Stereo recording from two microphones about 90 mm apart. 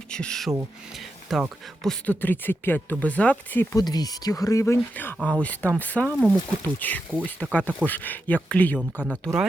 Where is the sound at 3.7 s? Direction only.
45° left (ahead or behind).